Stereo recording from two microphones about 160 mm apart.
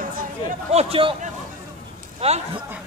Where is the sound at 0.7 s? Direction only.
40° right (ahead or behind).